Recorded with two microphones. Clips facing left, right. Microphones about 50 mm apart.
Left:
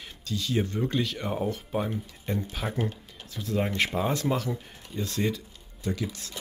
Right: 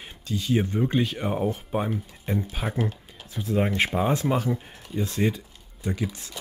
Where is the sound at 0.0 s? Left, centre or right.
Right.